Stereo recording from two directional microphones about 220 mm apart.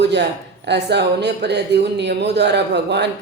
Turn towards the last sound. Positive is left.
turn(degrees=-50)  # may be behind; listen again after turning